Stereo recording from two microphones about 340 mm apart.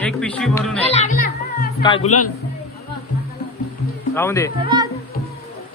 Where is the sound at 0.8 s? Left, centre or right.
Left.